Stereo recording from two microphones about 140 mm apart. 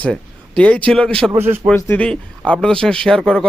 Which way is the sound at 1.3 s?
15° right (ahead or behind).